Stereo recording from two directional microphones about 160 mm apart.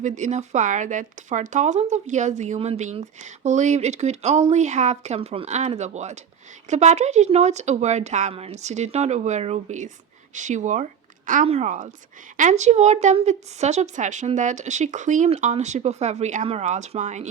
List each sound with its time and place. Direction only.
0.0 s a woman's voice: 45° right (ahead or behind)